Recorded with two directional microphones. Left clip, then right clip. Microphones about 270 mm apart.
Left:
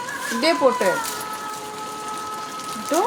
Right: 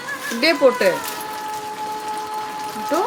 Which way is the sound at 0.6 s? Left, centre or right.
Centre.